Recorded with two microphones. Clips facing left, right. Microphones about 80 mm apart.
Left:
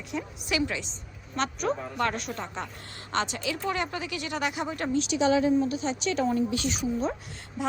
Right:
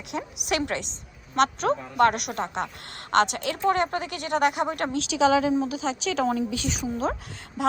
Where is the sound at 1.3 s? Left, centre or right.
Right.